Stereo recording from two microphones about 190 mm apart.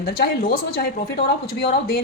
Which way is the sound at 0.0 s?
50° left (ahead or behind).